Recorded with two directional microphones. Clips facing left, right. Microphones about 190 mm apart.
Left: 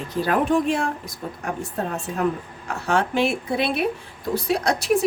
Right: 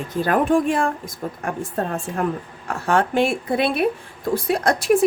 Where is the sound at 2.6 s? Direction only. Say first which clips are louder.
Right 2 dB; 55° right (ahead or behind).